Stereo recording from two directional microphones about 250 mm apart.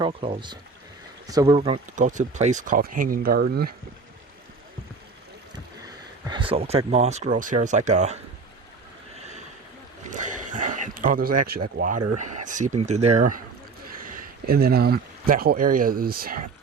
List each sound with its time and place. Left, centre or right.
0.0 s speech: centre; by 3.8 s right
5.5 s speech: centre
10.1 s a sound: right
12.1 s speech: right